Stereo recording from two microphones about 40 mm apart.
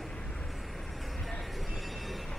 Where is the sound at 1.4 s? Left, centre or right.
Centre.